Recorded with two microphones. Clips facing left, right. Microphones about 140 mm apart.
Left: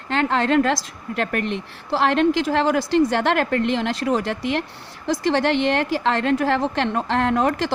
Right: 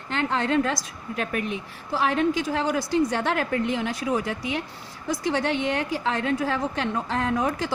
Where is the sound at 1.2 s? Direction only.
70° left (ahead or behind).